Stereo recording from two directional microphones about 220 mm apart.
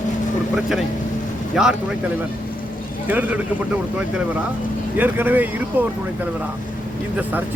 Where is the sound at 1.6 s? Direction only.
Centre (ahead or behind).